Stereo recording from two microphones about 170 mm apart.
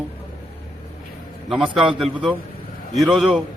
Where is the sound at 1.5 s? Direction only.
Centre (ahead or behind).